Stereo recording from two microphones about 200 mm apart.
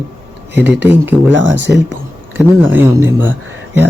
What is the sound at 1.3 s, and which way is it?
Speech, 70° right (ahead or behind).